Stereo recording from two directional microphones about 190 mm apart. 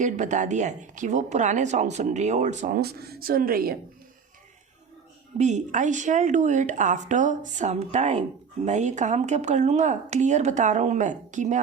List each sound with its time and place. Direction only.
0.0 s speech: 40° right (ahead or behind)
2.7 s speech: 55° right (ahead or behind)
5.4 s speech: 40° right (ahead or behind)